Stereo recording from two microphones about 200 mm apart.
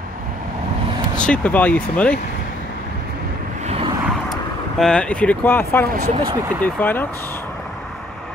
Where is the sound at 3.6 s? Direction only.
30° right (ahead or behind).